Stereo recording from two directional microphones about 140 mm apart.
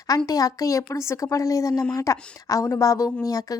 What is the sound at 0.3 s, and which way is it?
A woman's voice, 25° left (ahead or behind).